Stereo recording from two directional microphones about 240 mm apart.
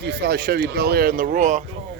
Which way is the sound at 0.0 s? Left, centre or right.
Right.